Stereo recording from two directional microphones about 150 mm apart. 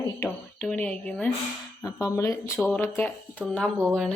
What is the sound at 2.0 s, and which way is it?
Speech, 20° left (ahead or behind).